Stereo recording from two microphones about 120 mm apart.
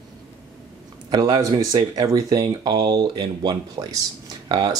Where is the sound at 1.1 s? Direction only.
30° right (ahead or behind).